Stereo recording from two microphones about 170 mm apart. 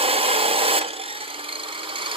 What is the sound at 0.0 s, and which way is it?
Wood, 35° right (ahead or behind).